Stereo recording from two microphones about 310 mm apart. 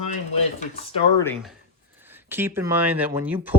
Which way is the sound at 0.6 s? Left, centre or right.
Centre.